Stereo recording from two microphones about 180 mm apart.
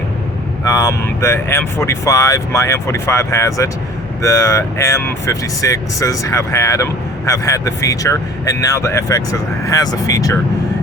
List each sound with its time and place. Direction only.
0.6 s speech: 20° left (ahead or behind)